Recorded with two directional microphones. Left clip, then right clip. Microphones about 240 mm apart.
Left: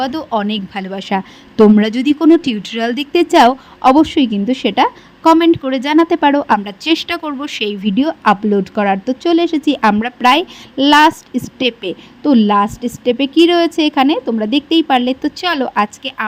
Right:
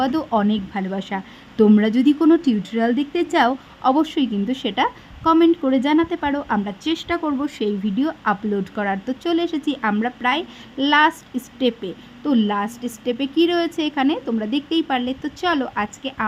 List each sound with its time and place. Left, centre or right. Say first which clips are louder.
0.0 s a woman's voice: left 2 dB; centre